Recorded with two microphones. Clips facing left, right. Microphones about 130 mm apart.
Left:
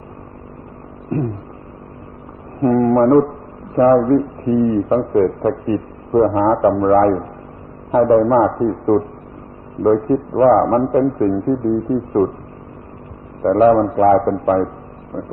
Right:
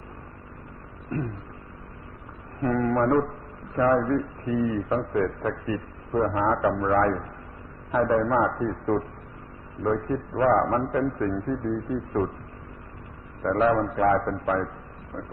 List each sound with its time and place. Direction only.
1.1 s a man's voice: 35° left (ahead or behind)
2.6 s a man's voice: 40° left (ahead or behind)
13.4 s a man's voice: 40° left (ahead or behind)
15.1 s a sound: 40° left (ahead or behind)